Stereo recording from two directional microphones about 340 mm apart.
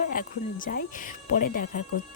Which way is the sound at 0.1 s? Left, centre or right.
Left.